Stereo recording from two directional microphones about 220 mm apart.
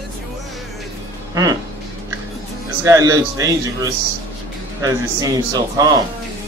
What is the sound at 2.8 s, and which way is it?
A man's voice, 15° right (ahead or behind).